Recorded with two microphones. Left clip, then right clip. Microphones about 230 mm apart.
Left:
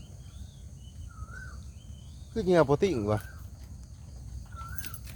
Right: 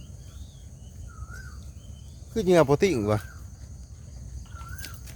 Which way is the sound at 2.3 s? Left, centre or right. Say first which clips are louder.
Right 4 dB; centre.